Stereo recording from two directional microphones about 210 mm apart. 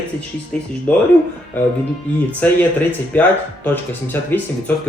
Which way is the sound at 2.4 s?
5° left (ahead or behind).